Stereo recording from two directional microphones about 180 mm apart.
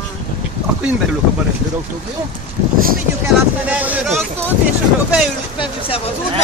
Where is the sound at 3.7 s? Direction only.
10° right (ahead or behind).